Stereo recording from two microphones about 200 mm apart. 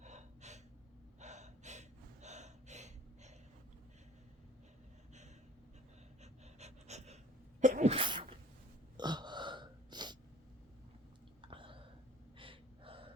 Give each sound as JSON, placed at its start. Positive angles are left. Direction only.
{"t": 0.0, "sound": "gasp", "side_deg": -35}
{"t": 6.6, "sound": "breathing", "side_deg": -35}
{"t": 7.6, "sound": "sneeze", "side_deg": -40}
{"t": 7.9, "sound": "sneeze", "side_deg": -25}
{"t": 9.0, "sound": "burping", "side_deg": -20}
{"t": 11.5, "sound": "whispering", "side_deg": -25}
{"t": 12.4, "sound": "gasp", "side_deg": -25}